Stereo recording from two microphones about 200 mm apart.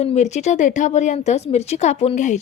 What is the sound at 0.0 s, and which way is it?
A woman's voice, 35° left (ahead or behind).